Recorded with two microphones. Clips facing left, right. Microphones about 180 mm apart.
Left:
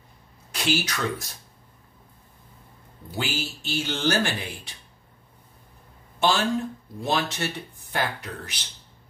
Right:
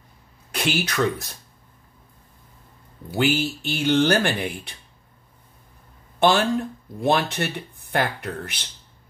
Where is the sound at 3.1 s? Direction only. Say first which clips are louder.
Right 9 dB; 60° right (ahead or behind).